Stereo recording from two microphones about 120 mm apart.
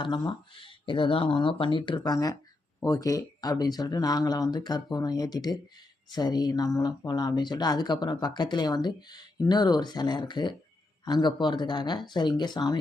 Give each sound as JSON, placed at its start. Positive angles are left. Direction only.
{"t": 0.0, "sound": "speech", "side_deg": 40}